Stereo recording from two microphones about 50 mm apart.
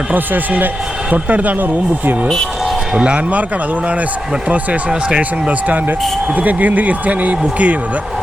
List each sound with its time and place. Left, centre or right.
0.1 s speech: right
2.9 s speech: centre
4.4 s speech: right
6.3 s speech: right